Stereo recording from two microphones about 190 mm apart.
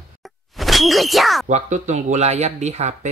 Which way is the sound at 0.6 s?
Centre (ahead or behind).